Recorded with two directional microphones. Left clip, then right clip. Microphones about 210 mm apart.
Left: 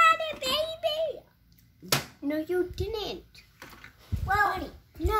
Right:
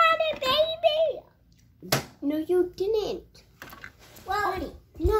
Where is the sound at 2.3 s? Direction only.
15° left (ahead or behind).